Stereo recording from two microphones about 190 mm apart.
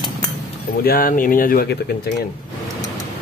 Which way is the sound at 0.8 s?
50° left (ahead or behind).